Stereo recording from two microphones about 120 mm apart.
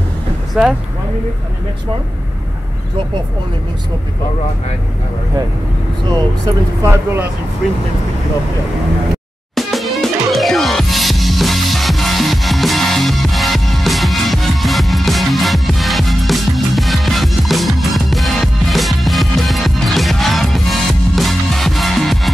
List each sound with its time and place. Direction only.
0.6 s speech: 5° right (ahead or behind)
6.8 s speech: 20° right (ahead or behind)
9.6 s music: centre (ahead or behind)